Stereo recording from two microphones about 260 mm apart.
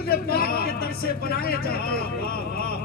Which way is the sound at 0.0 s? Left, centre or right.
Left.